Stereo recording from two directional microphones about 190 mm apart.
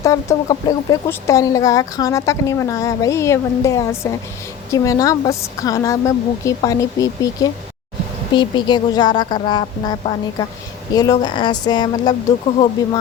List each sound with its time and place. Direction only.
0.0 s speech: 15° left (ahead or behind)